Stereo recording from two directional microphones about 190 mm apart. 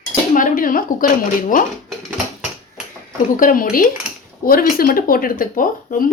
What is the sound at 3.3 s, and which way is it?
Speech, 45° left (ahead or behind).